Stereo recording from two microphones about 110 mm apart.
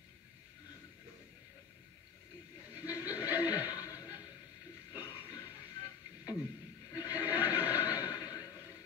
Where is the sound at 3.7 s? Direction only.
30° left (ahead or behind).